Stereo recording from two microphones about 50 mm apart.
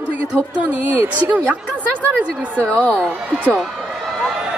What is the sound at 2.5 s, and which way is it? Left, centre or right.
Speech, left.